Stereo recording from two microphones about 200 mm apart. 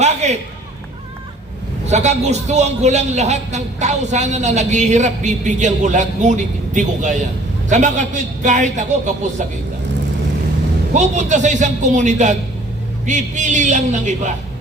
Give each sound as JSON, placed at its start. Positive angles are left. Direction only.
{"t": 0.0, "sound": "a sound", "side_deg": -35}
{"t": 1.9, "sound": "a man's voice", "side_deg": -35}
{"t": 10.9, "sound": "a man's voice", "side_deg": -35}